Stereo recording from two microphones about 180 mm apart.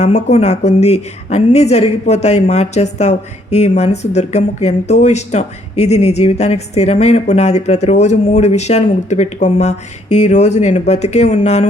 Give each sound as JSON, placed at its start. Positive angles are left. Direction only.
{"t": 0.0, "sound": "a woman's voice", "side_deg": 40}